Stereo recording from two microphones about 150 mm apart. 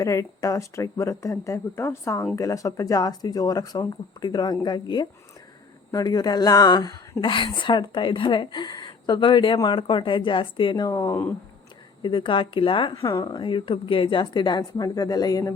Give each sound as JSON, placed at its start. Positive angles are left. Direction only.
{"t": 0.0, "sound": "a woman's voice", "side_deg": 20}
{"t": 12.0, "sound": "a woman's voice", "side_deg": 35}